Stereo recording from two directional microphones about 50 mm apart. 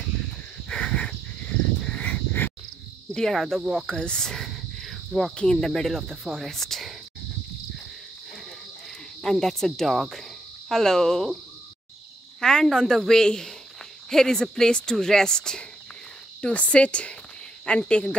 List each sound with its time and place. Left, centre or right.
0.7 s a sound: centre
3.1 s cricket: centre
3.7 s speech: centre
5.3 s speech: left
5.6 s cricket: centre
9.2 s speech: centre
12.4 s speech: centre